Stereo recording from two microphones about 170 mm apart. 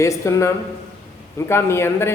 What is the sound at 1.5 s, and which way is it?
Speech, 15° left (ahead or behind).